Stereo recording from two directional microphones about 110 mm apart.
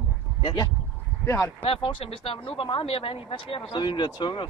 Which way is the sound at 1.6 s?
50° left (ahead or behind).